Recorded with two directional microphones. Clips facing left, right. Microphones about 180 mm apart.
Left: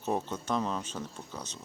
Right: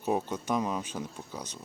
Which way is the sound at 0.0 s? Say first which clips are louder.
Right 2 dB; 10° right (ahead or behind).